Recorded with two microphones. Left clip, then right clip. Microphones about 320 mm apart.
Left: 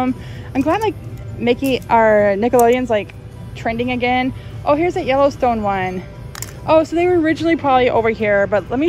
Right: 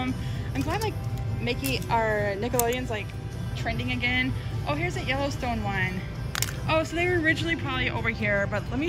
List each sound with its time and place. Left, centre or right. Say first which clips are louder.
0.6 s speech: left 13 dB; centre